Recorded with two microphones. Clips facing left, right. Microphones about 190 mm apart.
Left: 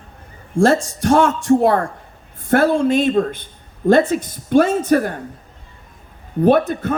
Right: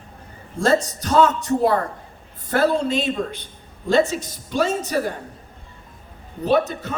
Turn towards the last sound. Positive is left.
turn(degrees=55)  # may be behind; listen again after turning